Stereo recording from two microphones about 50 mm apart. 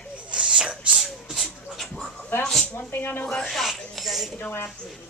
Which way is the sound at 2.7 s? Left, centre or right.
Left.